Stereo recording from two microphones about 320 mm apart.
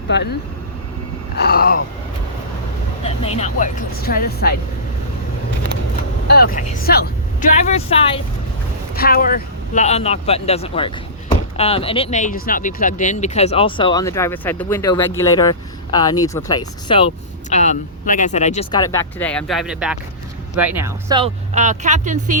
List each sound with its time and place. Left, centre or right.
0.1 s speech: left
1.4 s speech: left
3.0 s speech: centre
6.2 s speech: left; by 16.6 s centre
17.5 s speech: left; by 21.2 s centre
21.5 s speech: right